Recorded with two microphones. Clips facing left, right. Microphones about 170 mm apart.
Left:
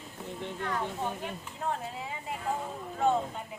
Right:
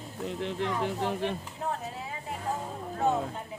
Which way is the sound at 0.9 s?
90° right.